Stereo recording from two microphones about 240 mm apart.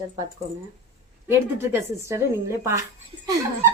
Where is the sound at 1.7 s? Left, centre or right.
Centre.